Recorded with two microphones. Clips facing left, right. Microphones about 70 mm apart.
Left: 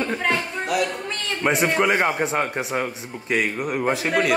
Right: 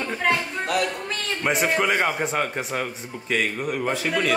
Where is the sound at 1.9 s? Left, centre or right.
Centre.